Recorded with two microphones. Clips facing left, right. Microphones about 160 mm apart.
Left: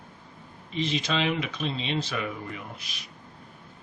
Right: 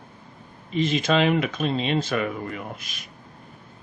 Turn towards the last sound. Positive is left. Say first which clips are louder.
# right 5 dB
turn(degrees=-50)  # may be behind; listen again after turning